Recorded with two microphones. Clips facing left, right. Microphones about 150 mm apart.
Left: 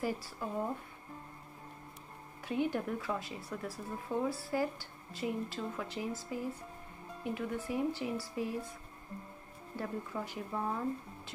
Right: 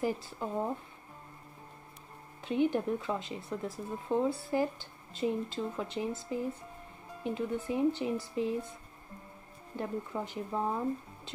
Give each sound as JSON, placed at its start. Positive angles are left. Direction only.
{"t": 0.0, "sound": "speech", "side_deg": -20}
{"t": 2.4, "sound": "speech", "side_deg": -20}
{"t": 9.8, "sound": "speech", "side_deg": -20}